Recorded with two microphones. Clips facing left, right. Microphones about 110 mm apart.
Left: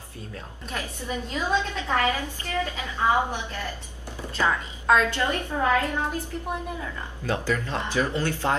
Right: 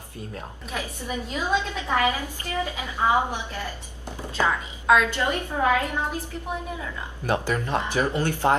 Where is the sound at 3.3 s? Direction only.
15° right (ahead or behind).